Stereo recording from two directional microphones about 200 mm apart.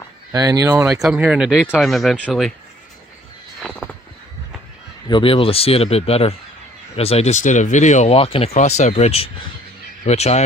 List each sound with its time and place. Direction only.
0.3 s speech: 15° right (ahead or behind); by 2.5 s centre (ahead or behind)
5.0 s speech: 25° left (ahead or behind)